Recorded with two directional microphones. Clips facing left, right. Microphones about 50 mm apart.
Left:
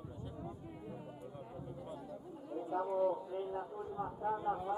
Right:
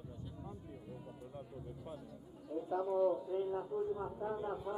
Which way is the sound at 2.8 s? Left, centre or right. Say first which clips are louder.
Right 1 dB; left.